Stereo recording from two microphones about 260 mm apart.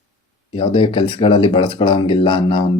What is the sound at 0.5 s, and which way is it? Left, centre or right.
Speech, centre.